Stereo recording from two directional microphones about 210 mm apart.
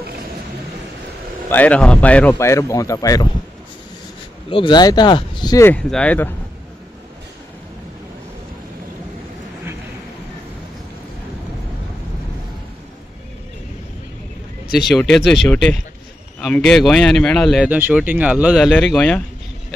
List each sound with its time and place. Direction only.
1.5 s speech: 5° left (ahead or behind)
4.5 s speech: 25° left (ahead or behind); by 6.3 s 5° left (ahead or behind)
14.8 s speech: centre (ahead or behind)